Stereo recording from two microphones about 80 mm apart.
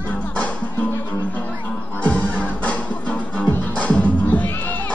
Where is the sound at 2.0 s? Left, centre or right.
Centre.